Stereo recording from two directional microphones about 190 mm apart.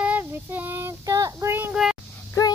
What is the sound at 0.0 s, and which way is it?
Child singing, 10° right (ahead or behind).